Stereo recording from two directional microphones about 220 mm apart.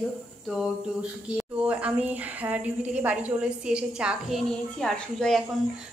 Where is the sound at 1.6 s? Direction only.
5° right (ahead or behind).